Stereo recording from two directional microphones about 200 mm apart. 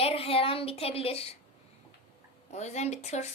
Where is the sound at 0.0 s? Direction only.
30° left (ahead or behind).